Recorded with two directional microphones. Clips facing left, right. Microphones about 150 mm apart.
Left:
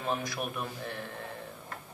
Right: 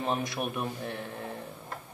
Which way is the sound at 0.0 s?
20° right (ahead or behind).